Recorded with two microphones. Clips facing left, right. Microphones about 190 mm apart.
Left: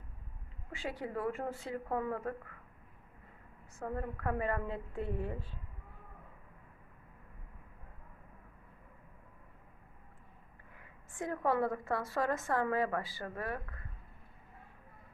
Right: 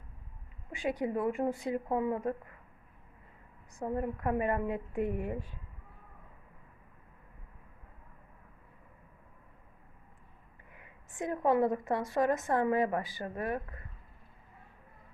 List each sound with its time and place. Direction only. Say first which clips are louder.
0.7 s a woman's voice: right 7 dB; 15° right (ahead or behind)
3.8 s a woman's voice: right 5 dB; 20° right (ahead or behind)
10.8 s a woman's voice: right 3 dB; 20° right (ahead or behind)